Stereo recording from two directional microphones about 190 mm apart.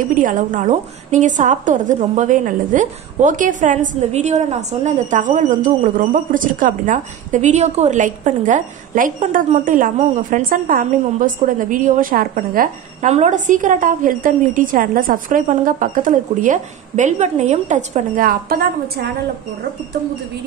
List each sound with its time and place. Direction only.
0.1 s a woman's voice: 45° right (ahead or behind)